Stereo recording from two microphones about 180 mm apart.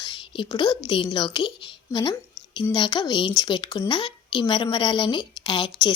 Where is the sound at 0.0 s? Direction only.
25° left (ahead or behind).